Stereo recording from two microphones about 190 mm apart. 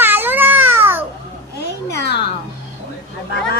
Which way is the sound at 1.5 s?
60° left (ahead or behind).